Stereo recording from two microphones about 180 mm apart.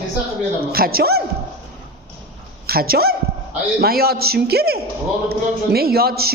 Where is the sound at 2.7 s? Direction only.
55° right (ahead or behind).